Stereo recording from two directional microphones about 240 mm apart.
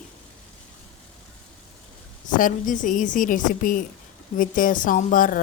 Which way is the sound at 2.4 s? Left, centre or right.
Left.